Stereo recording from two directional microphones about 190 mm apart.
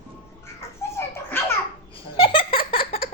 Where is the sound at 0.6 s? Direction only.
15° left (ahead or behind).